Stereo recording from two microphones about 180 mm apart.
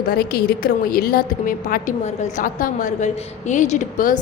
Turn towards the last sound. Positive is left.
turn(degrees=45)  # may be behind; listen again after turning